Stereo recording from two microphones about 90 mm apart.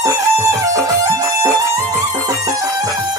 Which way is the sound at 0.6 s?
35° right (ahead or behind).